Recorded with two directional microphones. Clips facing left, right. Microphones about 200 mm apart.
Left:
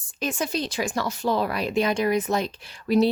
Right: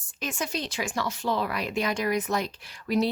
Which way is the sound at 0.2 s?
30° left (ahead or behind).